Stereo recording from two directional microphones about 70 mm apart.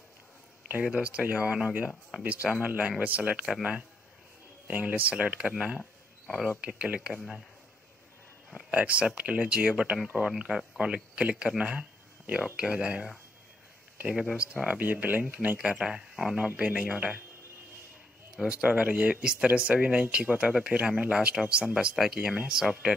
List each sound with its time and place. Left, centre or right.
0.8 s speech: centre
1.9 s speech: centre
2.2 s speech: right
4.6 s speech: right
5.8 s a sound: centre
6.6 s speech: centre
8.5 s speech: centre
14.8 s speech: right
15.8 s speech: centre
18.3 s speech: centre
21.9 s speech: centre